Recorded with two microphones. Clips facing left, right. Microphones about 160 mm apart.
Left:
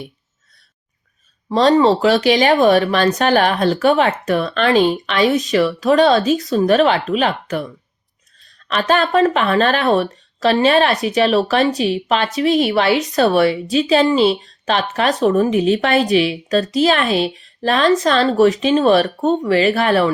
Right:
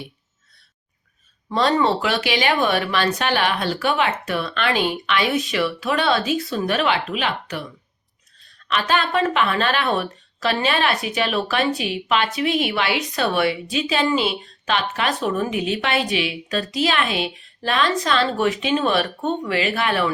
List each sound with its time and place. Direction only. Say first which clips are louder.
1.5 s speech: left 6 dB; 35° left (ahead or behind)
8.6 s speech: left 5 dB; 40° left (ahead or behind)